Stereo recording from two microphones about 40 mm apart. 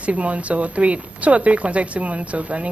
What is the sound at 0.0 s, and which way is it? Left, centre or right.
Speech, right.